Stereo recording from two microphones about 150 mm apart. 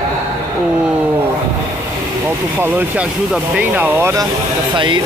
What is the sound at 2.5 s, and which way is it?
Speech, 10° right (ahead or behind).